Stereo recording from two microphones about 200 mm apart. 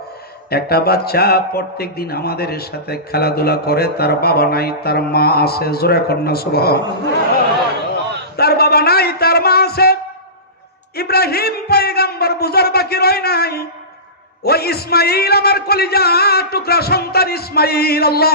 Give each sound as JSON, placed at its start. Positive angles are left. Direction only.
{"t": 0.5, "sound": "a man's voice", "side_deg": 50}
{"t": 8.4, "sound": "a sound", "side_deg": 50}
{"t": 14.4, "sound": "a man's voice", "side_deg": 50}